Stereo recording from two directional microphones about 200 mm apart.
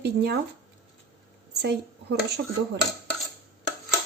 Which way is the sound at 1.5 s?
55° right (ahead or behind).